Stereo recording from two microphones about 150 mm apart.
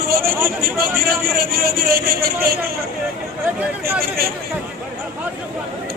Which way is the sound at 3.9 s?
90° right.